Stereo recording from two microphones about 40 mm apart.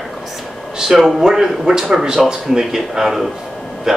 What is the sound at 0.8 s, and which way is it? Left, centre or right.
Speech, centre.